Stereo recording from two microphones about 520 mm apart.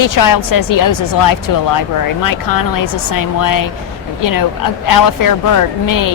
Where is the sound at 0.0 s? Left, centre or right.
Left.